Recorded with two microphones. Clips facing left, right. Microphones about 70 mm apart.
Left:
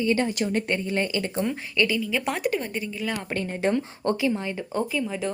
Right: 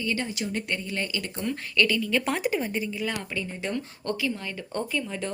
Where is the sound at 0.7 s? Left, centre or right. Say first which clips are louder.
Left 5 dB; left.